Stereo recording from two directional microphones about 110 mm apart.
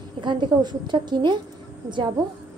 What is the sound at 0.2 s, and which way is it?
A woman's voice, 45° right (ahead or behind).